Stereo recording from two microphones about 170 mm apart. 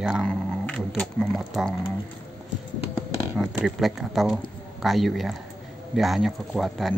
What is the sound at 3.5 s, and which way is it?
Speech, 5° right (ahead or behind).